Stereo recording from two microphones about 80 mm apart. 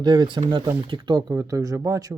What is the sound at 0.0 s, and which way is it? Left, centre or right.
Speech, right.